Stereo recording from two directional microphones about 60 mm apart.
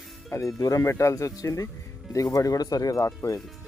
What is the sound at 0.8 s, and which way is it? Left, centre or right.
Speech, left.